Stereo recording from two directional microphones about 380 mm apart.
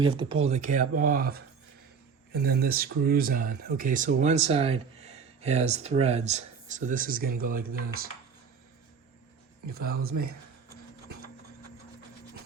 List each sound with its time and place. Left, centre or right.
0.0 s speech: centre
9.6 s speech: right